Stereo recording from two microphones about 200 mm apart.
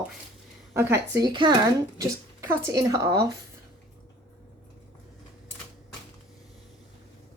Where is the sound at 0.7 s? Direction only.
15° right (ahead or behind).